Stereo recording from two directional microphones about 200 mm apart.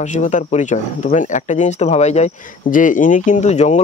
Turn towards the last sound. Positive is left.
turn(degrees=35)  # may be behind; listen again after turning